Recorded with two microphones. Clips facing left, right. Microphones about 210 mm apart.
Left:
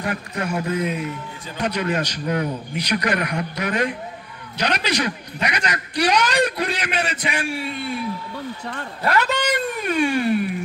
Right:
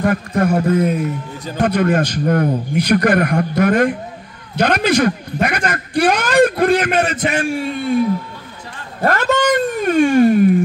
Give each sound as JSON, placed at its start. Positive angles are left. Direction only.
{"t": 0.0, "sound": "a man's voice", "side_deg": -50}
{"t": 9.0, "sound": "a man's voice", "side_deg": -45}